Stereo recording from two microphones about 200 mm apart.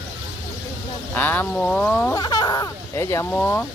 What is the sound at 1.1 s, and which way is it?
Speech, 10° left (ahead or behind).